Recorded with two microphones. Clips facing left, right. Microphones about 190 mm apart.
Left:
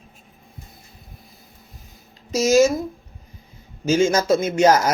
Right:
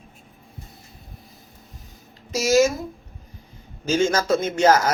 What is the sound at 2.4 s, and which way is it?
Speech, 20° left (ahead or behind).